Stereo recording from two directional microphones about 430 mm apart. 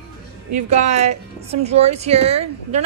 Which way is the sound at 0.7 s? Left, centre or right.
Centre.